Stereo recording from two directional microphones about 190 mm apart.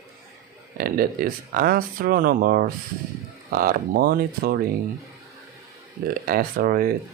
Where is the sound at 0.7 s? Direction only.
50° right (ahead or behind).